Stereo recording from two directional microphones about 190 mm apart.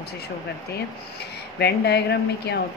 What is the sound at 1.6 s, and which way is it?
A woman's voice, 60° left (ahead or behind).